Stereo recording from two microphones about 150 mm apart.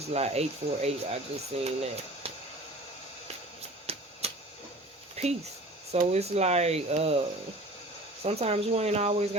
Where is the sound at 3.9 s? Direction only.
40° right (ahead or behind).